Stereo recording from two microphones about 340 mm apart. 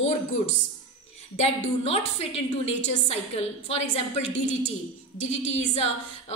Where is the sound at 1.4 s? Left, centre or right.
Centre.